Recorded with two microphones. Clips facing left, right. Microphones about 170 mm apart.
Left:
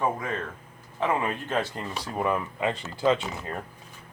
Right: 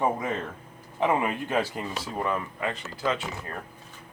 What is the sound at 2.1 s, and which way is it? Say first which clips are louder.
Speech: left 3 dB; 10° left (ahead or behind).